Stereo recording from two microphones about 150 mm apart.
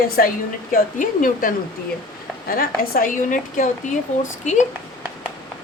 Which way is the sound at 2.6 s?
75° left (ahead or behind).